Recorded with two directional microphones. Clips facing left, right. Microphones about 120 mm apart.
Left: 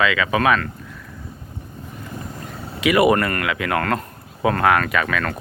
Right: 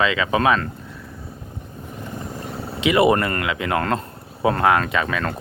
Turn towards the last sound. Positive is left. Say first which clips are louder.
# left 1 dB
turn(degrees=-25)  # may be behind; listen again after turning